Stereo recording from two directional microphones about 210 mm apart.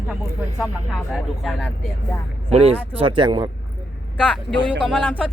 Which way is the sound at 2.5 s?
30° right (ahead or behind).